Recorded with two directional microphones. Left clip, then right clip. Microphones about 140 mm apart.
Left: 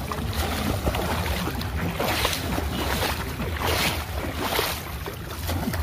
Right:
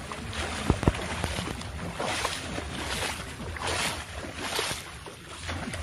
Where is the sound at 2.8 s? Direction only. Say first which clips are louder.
Left 5 dB; centre (ahead or behind).